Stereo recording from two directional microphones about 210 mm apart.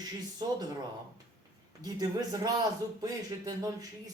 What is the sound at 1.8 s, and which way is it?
Speech, 20° right (ahead or behind).